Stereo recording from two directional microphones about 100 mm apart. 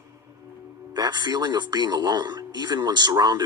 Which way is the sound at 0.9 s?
45° right (ahead or behind).